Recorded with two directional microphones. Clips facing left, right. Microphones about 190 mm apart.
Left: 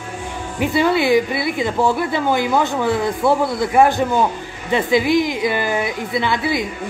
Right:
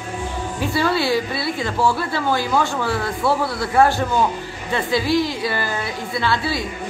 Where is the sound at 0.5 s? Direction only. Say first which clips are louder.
Left 4 dB; 20° left (ahead or behind).